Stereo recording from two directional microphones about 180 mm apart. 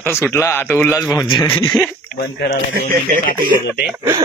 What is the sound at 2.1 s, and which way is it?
Speech, 65° left (ahead or behind).